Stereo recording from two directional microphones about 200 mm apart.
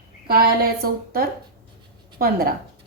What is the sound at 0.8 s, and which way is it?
A woman's voice, 45° right (ahead or behind).